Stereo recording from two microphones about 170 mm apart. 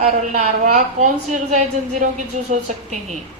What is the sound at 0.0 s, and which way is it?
A woman's voice, 45° right (ahead or behind).